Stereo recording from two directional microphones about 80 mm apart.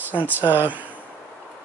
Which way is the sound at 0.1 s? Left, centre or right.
Right.